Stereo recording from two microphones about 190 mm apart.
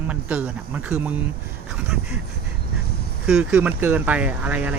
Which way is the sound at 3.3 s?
5° right (ahead or behind).